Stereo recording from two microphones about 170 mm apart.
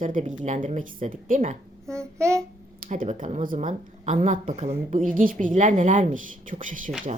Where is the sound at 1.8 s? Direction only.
15° right (ahead or behind).